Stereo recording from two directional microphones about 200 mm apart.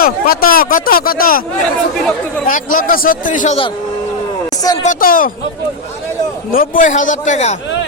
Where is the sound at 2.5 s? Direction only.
45° left (ahead or behind).